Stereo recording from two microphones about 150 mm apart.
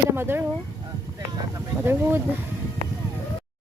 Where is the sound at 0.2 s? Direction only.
15° right (ahead or behind).